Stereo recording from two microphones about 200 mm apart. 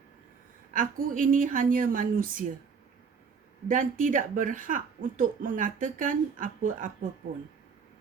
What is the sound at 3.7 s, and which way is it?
A woman's voice, 40° right (ahead or behind).